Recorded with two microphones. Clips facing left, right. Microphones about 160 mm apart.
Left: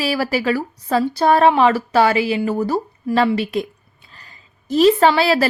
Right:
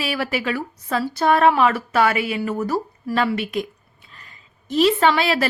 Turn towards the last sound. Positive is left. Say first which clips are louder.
# left 4 dB
turn(degrees=35)  # may be behind; listen again after turning